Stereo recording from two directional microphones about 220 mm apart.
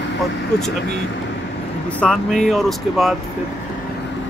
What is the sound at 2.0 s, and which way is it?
Speech, centre (ahead or behind).